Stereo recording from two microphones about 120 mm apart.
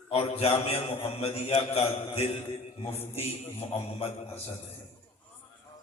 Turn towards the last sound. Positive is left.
turn(degrees=55)  # may be behind; listen again after turning